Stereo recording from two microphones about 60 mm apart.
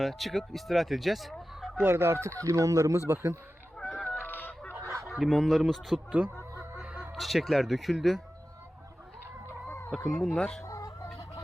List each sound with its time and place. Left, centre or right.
0.0 s speech: centre
1.8 s speech: right
3.1 s speech: right
3.8 s honk: centre
4.2 s fowl: left
5.0 s speech: centre
6.1 s speech: right
6.8 s crow: centre
7.1 s speech: centre
9.9 s speech: centre
10.6 s chicken: left